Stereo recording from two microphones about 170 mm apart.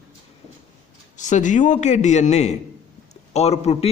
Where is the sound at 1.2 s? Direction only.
45° left (ahead or behind).